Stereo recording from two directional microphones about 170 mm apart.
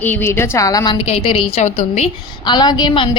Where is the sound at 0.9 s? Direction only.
35° left (ahead or behind).